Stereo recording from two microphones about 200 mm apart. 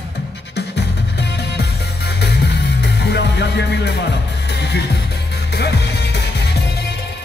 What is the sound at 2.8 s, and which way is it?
Music, 60° left (ahead or behind).